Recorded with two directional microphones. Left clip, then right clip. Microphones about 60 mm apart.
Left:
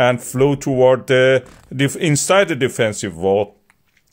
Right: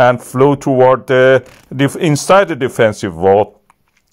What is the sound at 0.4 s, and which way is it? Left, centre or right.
Speech, right.